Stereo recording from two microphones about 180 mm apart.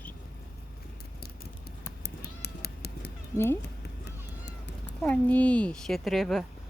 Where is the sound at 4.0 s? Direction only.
75° left (ahead or behind).